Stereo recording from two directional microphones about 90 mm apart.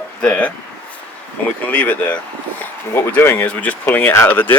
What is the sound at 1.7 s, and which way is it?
Speech, 15° left (ahead or behind).